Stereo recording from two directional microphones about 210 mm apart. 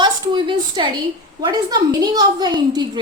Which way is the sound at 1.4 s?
20° right (ahead or behind).